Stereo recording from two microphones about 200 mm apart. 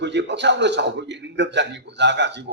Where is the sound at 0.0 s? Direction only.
60° right (ahead or behind).